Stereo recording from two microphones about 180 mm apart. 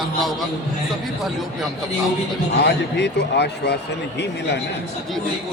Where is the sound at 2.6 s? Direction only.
75° left (ahead or behind).